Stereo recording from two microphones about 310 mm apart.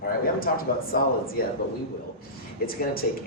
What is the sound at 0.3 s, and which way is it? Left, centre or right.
A man's voice, left.